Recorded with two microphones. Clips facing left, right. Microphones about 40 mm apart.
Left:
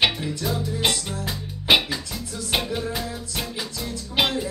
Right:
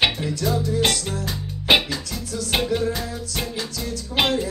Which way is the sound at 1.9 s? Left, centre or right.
Centre.